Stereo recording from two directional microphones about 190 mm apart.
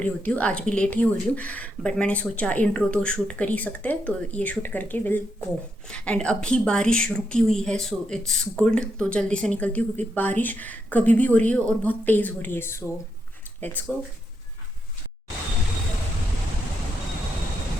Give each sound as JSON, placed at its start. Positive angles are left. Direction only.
{"t": 0.0, "sound": "a woman's voice", "side_deg": 10}